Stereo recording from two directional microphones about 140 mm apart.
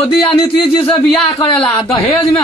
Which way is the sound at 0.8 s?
5° left (ahead or behind).